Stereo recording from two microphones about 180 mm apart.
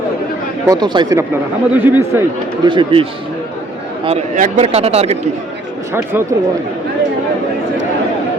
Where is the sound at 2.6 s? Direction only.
30° right (ahead or behind).